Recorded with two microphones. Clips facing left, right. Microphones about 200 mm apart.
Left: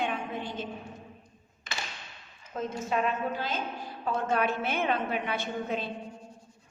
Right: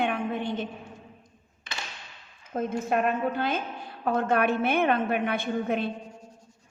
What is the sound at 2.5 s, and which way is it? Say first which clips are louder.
A woman's voice: right 4 dB; 55° right (ahead or behind).